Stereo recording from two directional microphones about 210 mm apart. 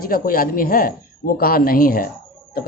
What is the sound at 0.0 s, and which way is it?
Speech, 45° left (ahead or behind).